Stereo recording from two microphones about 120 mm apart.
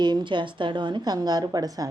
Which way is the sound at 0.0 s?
40° right (ahead or behind).